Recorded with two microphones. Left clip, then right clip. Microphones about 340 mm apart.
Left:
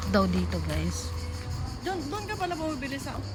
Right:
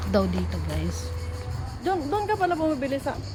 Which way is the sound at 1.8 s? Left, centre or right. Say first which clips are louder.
Right 8 dB; right.